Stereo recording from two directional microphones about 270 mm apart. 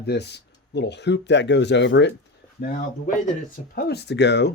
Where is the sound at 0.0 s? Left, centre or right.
Left.